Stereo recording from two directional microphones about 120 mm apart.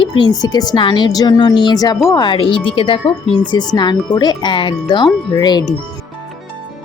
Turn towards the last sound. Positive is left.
turn(degrees=35)  # may be behind; listen again after turning